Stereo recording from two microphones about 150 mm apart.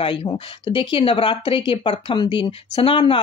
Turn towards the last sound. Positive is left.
turn(degrees=35)  # may be behind; listen again after turning